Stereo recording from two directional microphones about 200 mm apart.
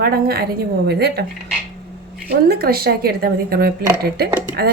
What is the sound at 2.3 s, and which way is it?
A woman's voice, 50° right (ahead or behind).